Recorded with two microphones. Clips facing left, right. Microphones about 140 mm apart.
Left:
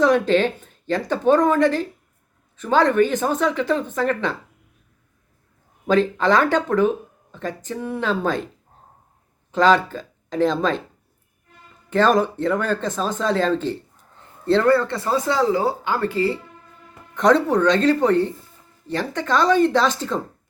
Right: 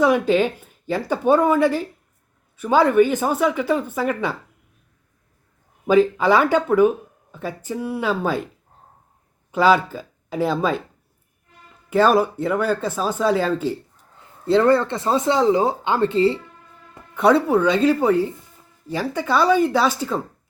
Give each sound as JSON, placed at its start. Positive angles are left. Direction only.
{"t": 0.0, "sound": "speech", "side_deg": -10}
{"t": 5.9, "sound": "speech", "side_deg": -10}
{"t": 9.5, "sound": "speech", "side_deg": -10}
{"t": 11.9, "sound": "speech", "side_deg": -10}
{"t": 14.6, "sound": "speech", "side_deg": -25}
{"t": 17.2, "sound": "speech", "side_deg": -10}